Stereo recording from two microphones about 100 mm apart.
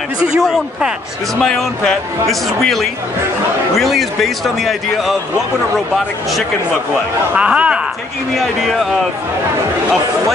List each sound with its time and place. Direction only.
0.4 s a man's voice: 5° right (ahead or behind)
1.4 s a man's voice: 5° left (ahead or behind)
7.3 s speech: 10° right (ahead or behind)